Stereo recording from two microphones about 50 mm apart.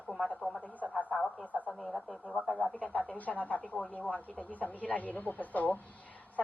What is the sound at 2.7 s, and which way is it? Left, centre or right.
Speech, left.